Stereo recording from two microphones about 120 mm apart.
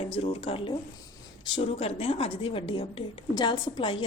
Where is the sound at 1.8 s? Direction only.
60° left (ahead or behind).